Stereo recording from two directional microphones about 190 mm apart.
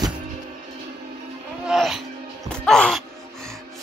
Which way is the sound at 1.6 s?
Centre (ahead or behind).